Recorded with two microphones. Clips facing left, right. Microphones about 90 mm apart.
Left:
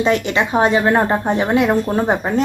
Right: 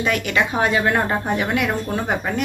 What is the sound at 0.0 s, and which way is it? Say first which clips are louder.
Speech: left 4 dB; 25° left (ahead or behind).